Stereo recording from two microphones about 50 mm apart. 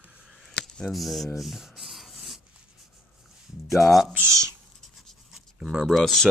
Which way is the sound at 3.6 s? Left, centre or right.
Centre.